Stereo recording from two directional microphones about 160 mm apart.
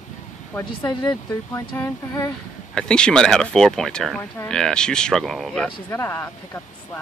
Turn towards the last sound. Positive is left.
turn(degrees=15)  # may be behind; listen again after turning